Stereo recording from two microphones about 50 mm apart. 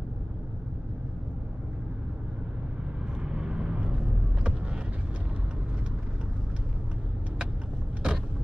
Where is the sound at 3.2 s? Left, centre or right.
Centre.